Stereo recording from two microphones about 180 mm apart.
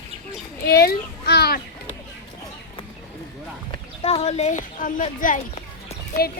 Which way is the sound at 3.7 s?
30° left (ahead or behind).